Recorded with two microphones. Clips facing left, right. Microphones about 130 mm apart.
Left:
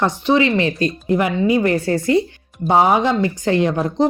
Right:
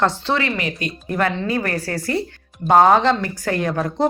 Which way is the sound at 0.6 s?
30° left (ahead or behind).